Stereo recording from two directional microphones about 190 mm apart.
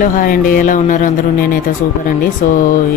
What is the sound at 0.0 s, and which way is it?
Speech, 45° left (ahead or behind).